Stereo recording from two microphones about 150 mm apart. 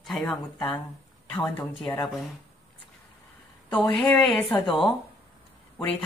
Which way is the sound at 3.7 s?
10° left (ahead or behind).